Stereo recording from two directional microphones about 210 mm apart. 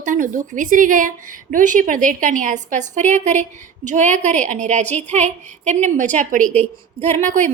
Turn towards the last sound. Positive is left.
turn(degrees=-35)  # may be behind; listen again after turning